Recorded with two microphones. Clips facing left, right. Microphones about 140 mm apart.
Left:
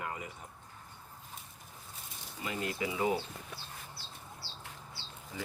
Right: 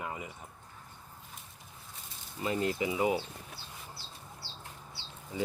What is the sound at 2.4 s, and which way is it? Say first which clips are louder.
Speech: right 5 dB; 30° right (ahead or behind).